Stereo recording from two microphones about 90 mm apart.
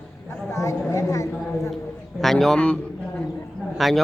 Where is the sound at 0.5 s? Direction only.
35° left (ahead or behind).